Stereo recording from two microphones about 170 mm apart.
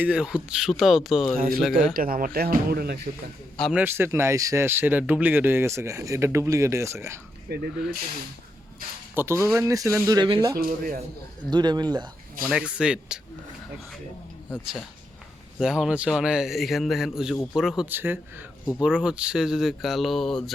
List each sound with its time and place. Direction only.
0.0 s speech: 5° right (ahead or behind)
1.4 s speech: 60° right (ahead or behind)
3.6 s speech: 5° right (ahead or behind)
7.5 s speech: 75° right (ahead or behind)
9.1 s speech: 15° right (ahead or behind)
10.6 s speech: 60° right (ahead or behind)
11.5 s speech: 25° right (ahead or behind)
12.5 s speech: 5° right (ahead or behind)
15.5 s speech: 5° right (ahead or behind)